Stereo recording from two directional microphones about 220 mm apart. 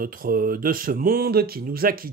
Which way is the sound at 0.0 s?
40° right (ahead or behind).